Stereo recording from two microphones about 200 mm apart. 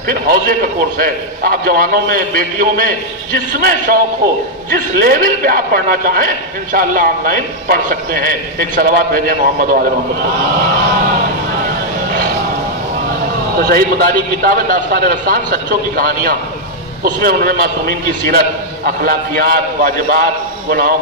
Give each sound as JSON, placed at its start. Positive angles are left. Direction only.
{"t": 0.1, "sound": "a man's voice", "side_deg": -45}
{"t": 5.0, "sound": "a man's voice", "side_deg": -45}
{"t": 13.6, "sound": "a man's voice", "side_deg": -50}